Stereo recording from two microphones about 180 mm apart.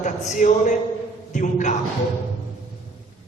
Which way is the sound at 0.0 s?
45° left (ahead or behind).